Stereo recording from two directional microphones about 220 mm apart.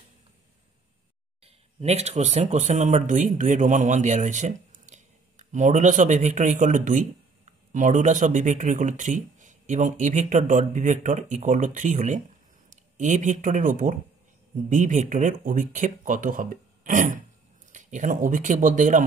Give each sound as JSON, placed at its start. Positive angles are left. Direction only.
{"t": 1.4, "sound": "speech", "side_deg": -30}